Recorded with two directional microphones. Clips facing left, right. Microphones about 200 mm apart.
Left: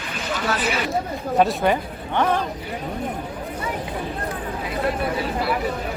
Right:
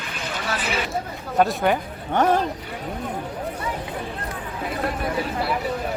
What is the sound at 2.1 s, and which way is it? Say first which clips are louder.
Speech: right 2 dB; 45° right (ahead or behind).